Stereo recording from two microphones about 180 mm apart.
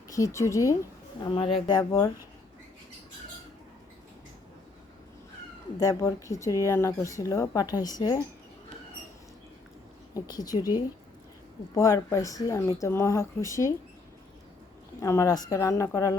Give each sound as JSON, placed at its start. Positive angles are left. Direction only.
{"t": 0.1, "sound": "speech", "side_deg": 15}
{"t": 1.2, "sound": "speech", "side_deg": 30}
{"t": 5.8, "sound": "speech", "side_deg": 20}
{"t": 10.2, "sound": "speech", "side_deg": 20}
{"t": 11.7, "sound": "speech", "side_deg": 20}
{"t": 15.0, "sound": "speech", "side_deg": 15}